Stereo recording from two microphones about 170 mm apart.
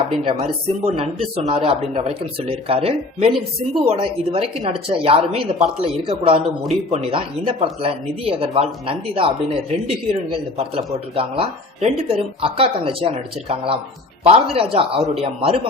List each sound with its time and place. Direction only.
0.3 s a woman's voice: 30° right (ahead or behind)
10.6 s a woman's voice: 35° right (ahead or behind)